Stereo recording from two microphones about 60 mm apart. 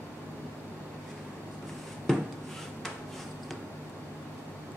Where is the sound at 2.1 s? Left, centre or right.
Centre.